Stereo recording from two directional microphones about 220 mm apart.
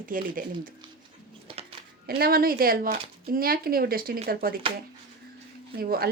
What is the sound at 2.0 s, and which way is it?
Speech, 45° right (ahead or behind).